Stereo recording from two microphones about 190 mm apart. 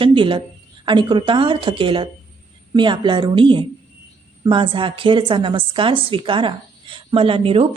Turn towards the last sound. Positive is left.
turn(degrees=-30)  # may be behind; listen again after turning